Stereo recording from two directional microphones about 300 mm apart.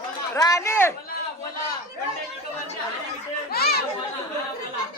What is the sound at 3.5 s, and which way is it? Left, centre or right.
Chatter, left.